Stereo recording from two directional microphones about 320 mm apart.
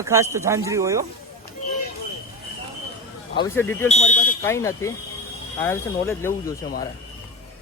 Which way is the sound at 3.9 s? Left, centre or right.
Left.